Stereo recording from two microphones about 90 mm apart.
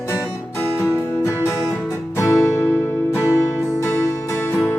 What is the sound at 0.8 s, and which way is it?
Music, 30° left (ahead or behind).